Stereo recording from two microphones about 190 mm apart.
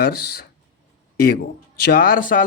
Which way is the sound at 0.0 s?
55° left (ahead or behind).